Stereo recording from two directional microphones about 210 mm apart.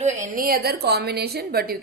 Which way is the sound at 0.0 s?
40° right (ahead or behind).